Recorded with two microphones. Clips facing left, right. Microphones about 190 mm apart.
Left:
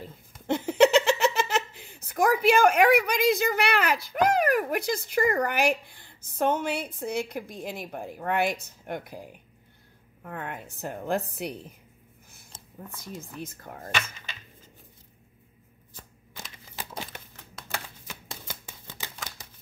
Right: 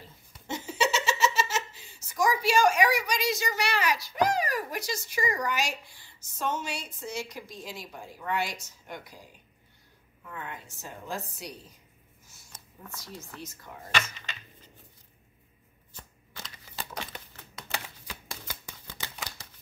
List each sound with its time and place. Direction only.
0.0 s a woman's voice: 55° left (ahead or behind)
12.5 s a sound: 25° left (ahead or behind)
13.4 s speech: 55° left (ahead or behind)
18.0 s shuffling cards: 20° left (ahead or behind)